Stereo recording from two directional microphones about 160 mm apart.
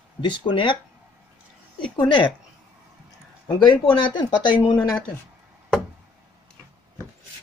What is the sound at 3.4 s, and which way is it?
Speech, 30° left (ahead or behind).